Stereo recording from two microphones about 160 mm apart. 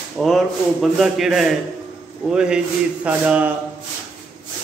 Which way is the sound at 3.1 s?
10° right (ahead or behind).